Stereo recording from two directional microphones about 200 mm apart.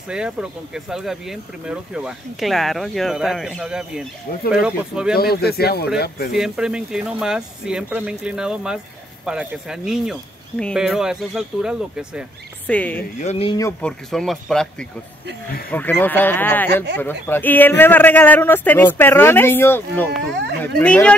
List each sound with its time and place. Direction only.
0.1 s speech: 5° right (ahead or behind)
5.1 s speech: 50° left (ahead or behind)
6.3 s speech: 5° right (ahead or behind)
12.6 s a man's voice: 5° left (ahead or behind)
13.2 s speech: 30° left (ahead or behind)
13.6 s a man's voice: 10° left (ahead or behind)